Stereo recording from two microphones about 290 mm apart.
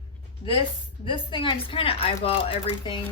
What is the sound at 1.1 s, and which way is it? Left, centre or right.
Speech, centre.